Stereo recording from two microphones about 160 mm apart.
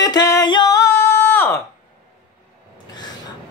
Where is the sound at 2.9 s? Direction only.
25° left (ahead or behind).